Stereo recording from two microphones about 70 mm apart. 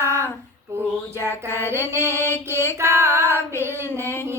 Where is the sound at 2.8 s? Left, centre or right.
Right.